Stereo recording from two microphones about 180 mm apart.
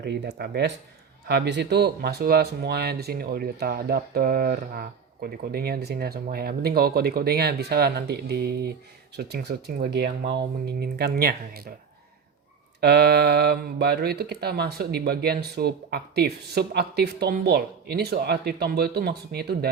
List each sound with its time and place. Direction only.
0.0 s speech: 70° right (ahead or behind)
12.8 s speech: 65° right (ahead or behind)